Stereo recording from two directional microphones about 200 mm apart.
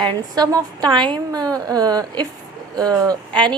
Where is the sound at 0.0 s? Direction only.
20° right (ahead or behind).